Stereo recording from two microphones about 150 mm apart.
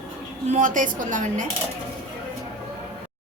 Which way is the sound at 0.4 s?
55° right (ahead or behind).